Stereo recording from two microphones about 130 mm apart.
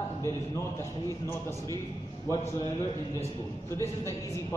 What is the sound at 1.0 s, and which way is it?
Speech, 20° left (ahead or behind).